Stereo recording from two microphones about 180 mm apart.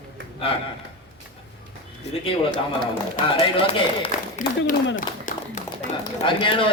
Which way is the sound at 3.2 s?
45° left (ahead or behind).